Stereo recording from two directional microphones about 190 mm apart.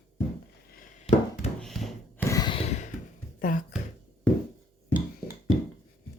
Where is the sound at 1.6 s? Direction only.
Centre (ahead or behind).